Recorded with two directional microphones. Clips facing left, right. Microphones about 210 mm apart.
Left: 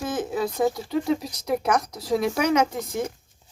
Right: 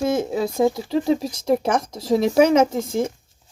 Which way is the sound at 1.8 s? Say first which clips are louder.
Right 4 dB; 45° right (ahead or behind).